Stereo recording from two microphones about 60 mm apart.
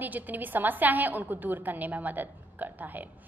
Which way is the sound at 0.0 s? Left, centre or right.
Right.